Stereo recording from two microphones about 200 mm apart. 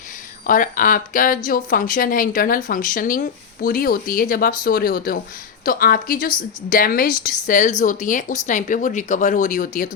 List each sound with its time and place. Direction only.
0.4 s a woman's voice: 45° left (ahead or behind)